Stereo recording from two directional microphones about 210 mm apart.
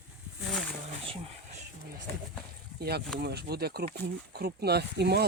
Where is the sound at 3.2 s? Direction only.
50° right (ahead or behind).